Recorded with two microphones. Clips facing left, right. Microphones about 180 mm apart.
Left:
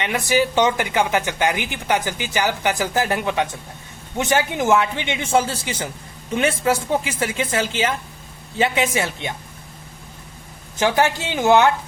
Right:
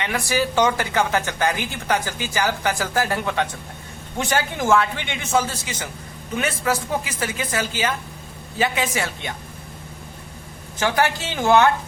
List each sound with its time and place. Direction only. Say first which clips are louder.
0.0 s speech: left 3 dB; 20° left (ahead or behind)
10.8 s speech: left 2 dB; 20° left (ahead or behind)